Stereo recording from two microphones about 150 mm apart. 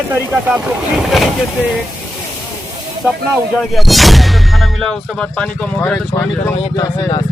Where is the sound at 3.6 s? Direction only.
Centre (ahead or behind).